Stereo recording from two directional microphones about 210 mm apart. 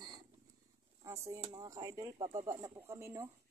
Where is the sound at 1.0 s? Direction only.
15° right (ahead or behind).